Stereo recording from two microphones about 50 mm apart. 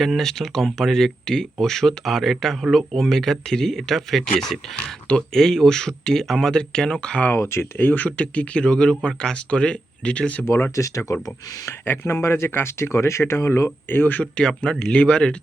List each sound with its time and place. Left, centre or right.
0.0 s speech: centre
7.3 s speech: left
7.8 s speech: left
10.8 s speech: left
12.0 s speech: left
13.9 s speech: left
14.3 s speech: centre